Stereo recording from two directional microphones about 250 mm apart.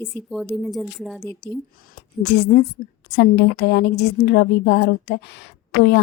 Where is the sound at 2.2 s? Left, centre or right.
Left.